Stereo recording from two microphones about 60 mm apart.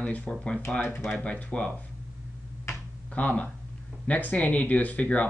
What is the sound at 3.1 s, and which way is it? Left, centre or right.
Speech, left.